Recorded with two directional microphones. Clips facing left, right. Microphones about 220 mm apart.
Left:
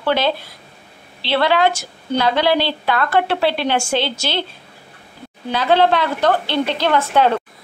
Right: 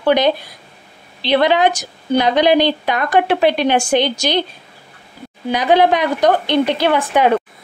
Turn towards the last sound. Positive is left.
turn(degrees=-15)  # may be behind; listen again after turning